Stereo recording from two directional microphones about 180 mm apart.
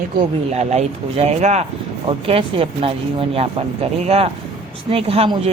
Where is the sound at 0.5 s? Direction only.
40° right (ahead or behind).